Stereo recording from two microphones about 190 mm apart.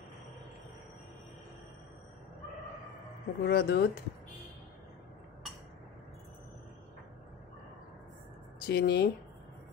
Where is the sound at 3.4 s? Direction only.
55° left (ahead or behind).